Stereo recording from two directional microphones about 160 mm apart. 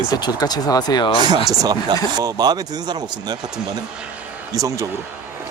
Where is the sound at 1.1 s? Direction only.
25° right (ahead or behind).